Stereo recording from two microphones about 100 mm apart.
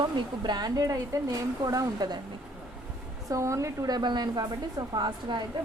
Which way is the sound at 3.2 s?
35° right (ahead or behind).